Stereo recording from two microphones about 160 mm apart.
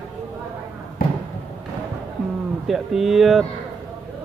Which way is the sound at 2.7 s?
Centre (ahead or behind).